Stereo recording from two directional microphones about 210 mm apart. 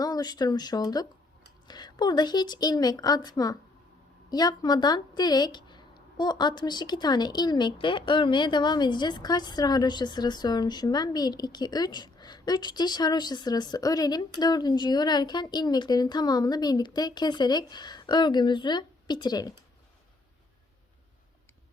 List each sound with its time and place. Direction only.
0.0 s speech: 20° left (ahead or behind)